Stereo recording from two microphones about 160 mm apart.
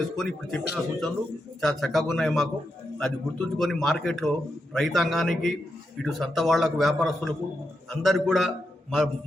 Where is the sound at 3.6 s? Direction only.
Centre (ahead or behind).